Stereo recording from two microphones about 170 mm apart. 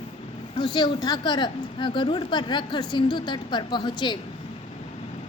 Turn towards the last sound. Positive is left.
turn(degrees=25)  # may be behind; listen again after turning